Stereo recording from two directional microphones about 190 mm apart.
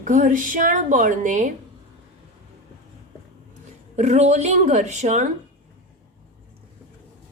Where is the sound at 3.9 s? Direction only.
35° right (ahead or behind).